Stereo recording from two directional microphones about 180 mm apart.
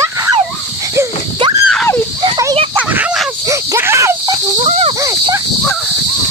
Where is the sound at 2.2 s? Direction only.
20° right (ahead or behind).